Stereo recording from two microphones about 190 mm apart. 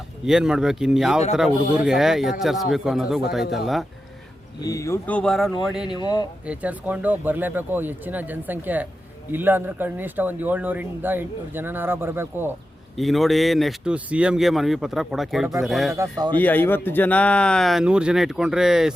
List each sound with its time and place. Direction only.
0.3 s speech: 5° right (ahead or behind)
4.6 s speech: 15° left (ahead or behind); by 6.0 s 5° right (ahead or behind)
6.0 s speech: 20° left (ahead or behind)
6.4 s speech: 5° right (ahead or behind)
13.0 s speech: centre (ahead or behind)
16.0 s speech: 20° right (ahead or behind)
16.4 s speech: 10° left (ahead or behind)